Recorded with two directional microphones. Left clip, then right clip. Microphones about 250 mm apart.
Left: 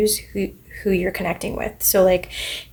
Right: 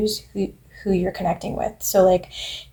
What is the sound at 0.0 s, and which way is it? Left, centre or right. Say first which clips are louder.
Speech: left 3 dB; left.